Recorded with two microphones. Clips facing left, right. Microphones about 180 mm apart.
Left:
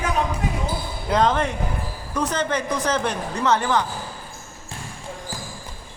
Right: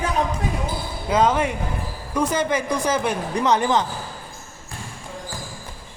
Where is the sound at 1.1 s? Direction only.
10° right (ahead or behind).